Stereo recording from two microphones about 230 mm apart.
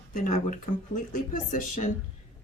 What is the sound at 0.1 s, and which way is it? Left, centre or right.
Speech, left.